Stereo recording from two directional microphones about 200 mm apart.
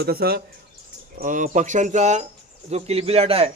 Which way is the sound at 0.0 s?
50° right (ahead or behind).